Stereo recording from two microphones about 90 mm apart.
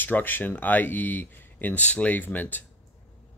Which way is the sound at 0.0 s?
20° left (ahead or behind).